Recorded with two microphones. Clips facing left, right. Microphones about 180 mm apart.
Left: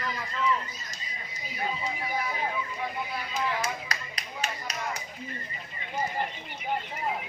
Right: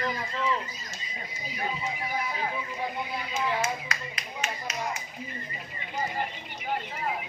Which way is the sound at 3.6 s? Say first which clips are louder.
Right 2 dB; 35° left (ahead or behind).